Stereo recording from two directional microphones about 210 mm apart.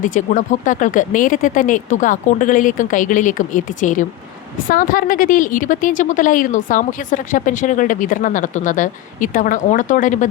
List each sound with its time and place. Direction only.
0.0 s speech: 40° left (ahead or behind)